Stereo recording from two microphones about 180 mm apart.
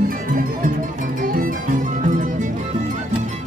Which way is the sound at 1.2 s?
50° right (ahead or behind).